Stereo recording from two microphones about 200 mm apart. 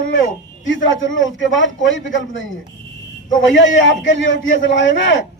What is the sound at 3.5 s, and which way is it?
A man's voice, 65° left (ahead or behind).